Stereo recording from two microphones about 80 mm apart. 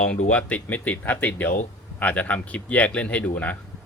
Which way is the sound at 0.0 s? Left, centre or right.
Centre.